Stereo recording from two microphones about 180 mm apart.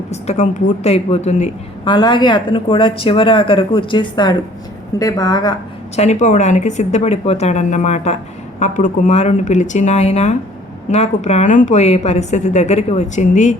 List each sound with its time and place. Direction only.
0.1 s speech: 40° left (ahead or behind)
1.8 s speech: 25° left (ahead or behind)
6.0 s speech: 40° left (ahead or behind)